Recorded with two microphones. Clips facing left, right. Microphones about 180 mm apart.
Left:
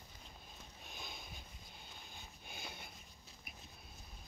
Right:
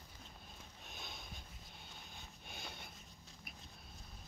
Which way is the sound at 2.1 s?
Centre (ahead or behind).